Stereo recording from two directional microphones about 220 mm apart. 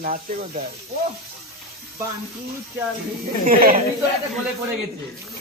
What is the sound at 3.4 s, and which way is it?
Speech, 40° right (ahead or behind).